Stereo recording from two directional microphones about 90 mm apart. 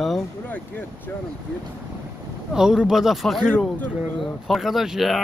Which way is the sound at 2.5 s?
5° right (ahead or behind).